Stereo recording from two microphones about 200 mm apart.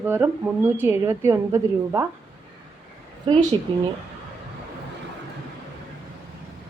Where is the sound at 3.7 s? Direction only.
25° right (ahead or behind).